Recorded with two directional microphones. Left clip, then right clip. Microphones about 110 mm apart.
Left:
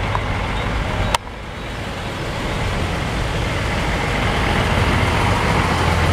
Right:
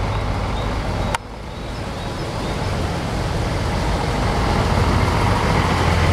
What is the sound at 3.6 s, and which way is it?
Vehicle, 25° left (ahead or behind).